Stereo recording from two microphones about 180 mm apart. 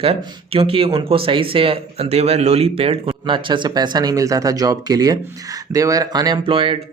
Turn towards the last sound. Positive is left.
turn(degrees=-30)  # may be behind; listen again after turning